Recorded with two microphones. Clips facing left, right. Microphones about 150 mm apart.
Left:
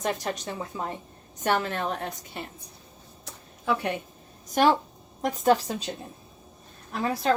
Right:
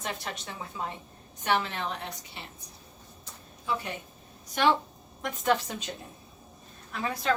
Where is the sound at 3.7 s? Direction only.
60° left (ahead or behind).